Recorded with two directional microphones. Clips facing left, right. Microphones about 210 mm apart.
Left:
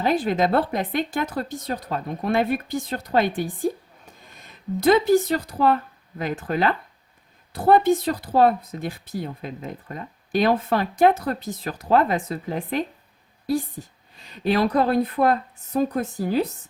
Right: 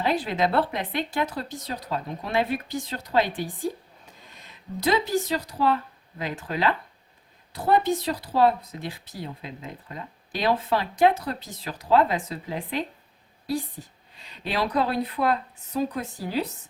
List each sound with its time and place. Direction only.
0.0 s speech: 45° left (ahead or behind)
14.2 s speech: 45° left (ahead or behind)